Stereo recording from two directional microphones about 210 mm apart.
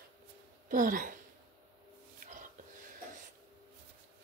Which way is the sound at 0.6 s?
40° right (ahead or behind).